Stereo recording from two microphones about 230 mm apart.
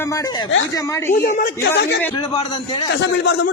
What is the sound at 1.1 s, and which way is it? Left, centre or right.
Speech, left.